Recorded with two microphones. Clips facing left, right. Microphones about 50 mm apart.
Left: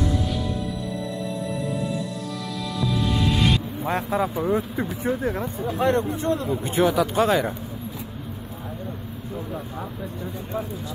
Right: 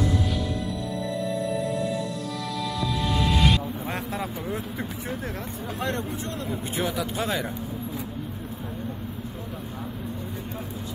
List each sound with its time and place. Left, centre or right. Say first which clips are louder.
1.5 s music: right 1 dB; centre
3.8 s vehicle: left 7 dB; left
4.4 s speech: left 8 dB; left